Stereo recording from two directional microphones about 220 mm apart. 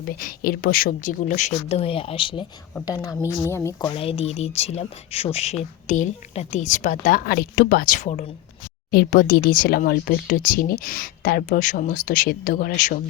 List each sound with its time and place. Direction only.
0.1 s a woman's voice: 40° left (ahead or behind); by 3.2 s 15° left (ahead or behind)
3.2 s speech: 10° right (ahead or behind)
3.5 s speech: 15° left (ahead or behind); by 13.0 s 35° left (ahead or behind)